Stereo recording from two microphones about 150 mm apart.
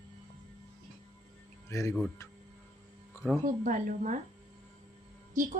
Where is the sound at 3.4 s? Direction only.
60° right (ahead or behind).